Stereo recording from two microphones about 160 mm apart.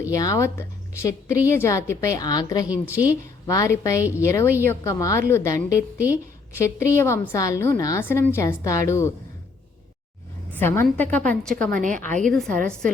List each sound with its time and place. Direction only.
0.1 s a woman's voice: 20° left (ahead or behind)
2.8 s a woman's voice: 10° right (ahead or behind)
3.1 s a woman's voice: 20° left (ahead or behind)
10.5 s a woman's voice: 15° left (ahead or behind)
11.8 s a woman's voice: 50° right (ahead or behind)
12.2 s a woman's voice: centre (ahead or behind)